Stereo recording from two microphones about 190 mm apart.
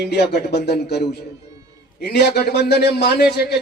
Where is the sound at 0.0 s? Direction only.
60° left (ahead or behind).